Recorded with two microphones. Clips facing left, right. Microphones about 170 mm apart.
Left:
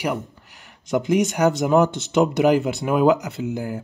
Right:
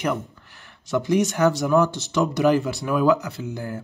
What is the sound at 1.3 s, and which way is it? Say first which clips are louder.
Speech: left 2 dB; 20° left (ahead or behind).